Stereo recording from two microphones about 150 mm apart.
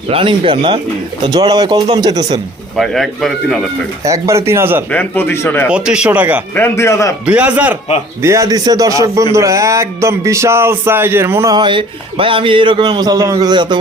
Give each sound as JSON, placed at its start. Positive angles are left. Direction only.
{"t": 0.1, "sound": "a man's voice", "side_deg": -35}
{"t": 2.7, "sound": "speech", "side_deg": 0}
{"t": 4.0, "sound": "speech", "side_deg": -20}
{"t": 4.9, "sound": "speech", "side_deg": 10}
{"t": 5.6, "sound": "speech", "side_deg": -5}
{"t": 6.5, "sound": "a man's voice", "side_deg": 15}
{"t": 7.3, "sound": "speech", "side_deg": -10}
{"t": 11.5, "sound": "a man's voice", "side_deg": -30}